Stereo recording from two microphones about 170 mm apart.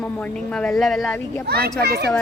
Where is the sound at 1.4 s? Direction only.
65° right (ahead or behind).